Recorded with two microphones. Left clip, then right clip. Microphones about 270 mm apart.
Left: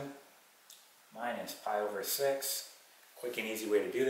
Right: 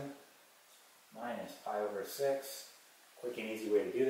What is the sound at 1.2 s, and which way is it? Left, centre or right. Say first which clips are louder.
Speech: left 4 dB; centre.